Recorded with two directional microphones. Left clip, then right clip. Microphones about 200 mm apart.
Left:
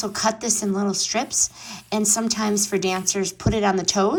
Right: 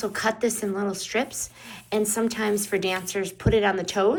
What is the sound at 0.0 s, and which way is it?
A woman's voice, 25° left (ahead or behind).